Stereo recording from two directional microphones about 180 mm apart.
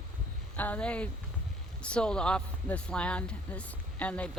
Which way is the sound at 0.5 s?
10° left (ahead or behind).